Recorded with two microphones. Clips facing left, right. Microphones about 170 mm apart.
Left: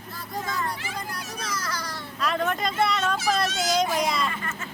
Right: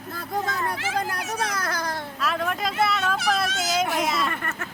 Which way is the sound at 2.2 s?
Centre (ahead or behind).